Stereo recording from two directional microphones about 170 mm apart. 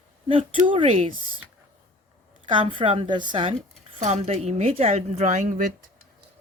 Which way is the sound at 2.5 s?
30° right (ahead or behind).